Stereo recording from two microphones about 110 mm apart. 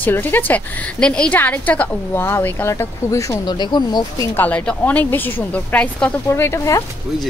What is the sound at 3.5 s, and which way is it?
Speech, 40° left (ahead or behind).